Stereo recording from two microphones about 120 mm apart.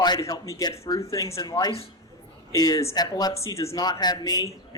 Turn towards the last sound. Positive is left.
turn(degrees=35)  # may be behind; listen again after turning